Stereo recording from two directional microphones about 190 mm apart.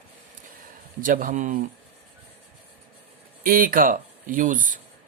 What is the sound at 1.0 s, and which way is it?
Speech, 45° right (ahead or behind).